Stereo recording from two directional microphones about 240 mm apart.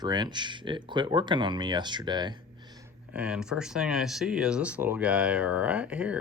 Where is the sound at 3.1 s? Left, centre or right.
Centre.